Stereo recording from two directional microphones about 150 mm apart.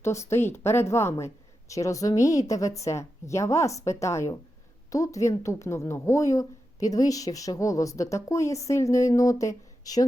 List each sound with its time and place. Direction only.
0.0 s a woman's voice: 20° left (ahead or behind)